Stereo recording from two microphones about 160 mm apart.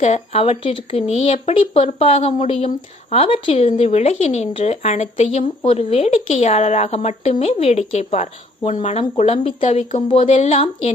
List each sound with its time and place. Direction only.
0.0 s speech: 40° left (ahead or behind)